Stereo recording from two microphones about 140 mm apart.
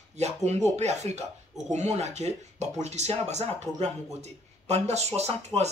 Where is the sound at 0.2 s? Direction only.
50° right (ahead or behind).